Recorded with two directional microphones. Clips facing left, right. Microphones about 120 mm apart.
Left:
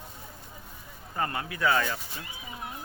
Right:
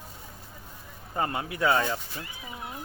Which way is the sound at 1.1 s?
20° right (ahead or behind).